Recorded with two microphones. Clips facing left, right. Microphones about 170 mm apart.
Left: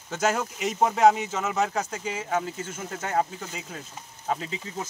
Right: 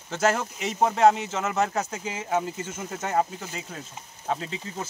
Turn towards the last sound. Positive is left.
turn(degrees=0)  # may be behind; listen again after turning